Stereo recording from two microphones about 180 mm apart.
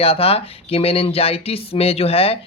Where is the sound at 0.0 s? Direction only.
35° left (ahead or behind).